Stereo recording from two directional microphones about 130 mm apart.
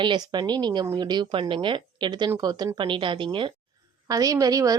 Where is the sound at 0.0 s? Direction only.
35° right (ahead or behind).